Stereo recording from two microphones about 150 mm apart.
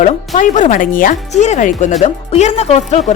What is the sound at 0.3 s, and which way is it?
Speech, 55° left (ahead or behind).